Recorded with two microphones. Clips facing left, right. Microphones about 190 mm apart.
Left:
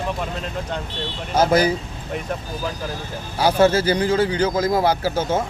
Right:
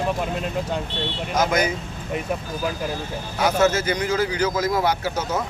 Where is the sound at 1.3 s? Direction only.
30° left (ahead or behind).